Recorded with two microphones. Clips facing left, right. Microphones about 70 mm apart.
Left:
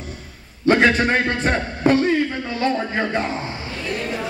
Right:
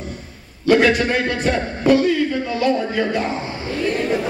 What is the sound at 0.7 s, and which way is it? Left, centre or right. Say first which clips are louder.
A man's voice: right 1 dB; left.